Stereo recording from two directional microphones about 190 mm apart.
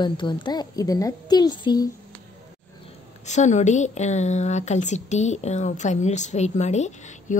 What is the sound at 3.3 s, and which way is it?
A woman's voice, 40° left (ahead or behind).